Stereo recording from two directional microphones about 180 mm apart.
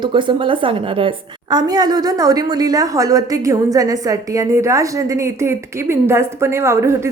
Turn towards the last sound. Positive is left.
turn(degrees=-15)  # may be behind; listen again after turning